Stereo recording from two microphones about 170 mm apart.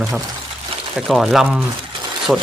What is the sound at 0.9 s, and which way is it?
A man's voice, centre (ahead or behind).